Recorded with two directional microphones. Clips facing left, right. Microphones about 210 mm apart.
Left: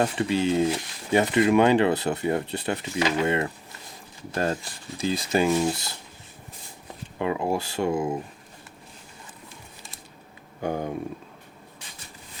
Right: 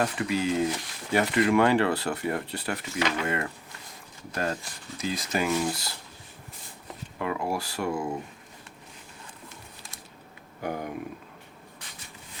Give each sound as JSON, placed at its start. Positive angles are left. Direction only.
{"t": 0.0, "sound": "speech", "side_deg": 25}
{"t": 7.2, "sound": "speech", "side_deg": 25}
{"t": 10.6, "sound": "speech", "side_deg": 25}